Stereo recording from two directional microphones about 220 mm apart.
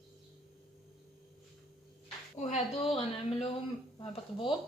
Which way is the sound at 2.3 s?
30° left (ahead or behind).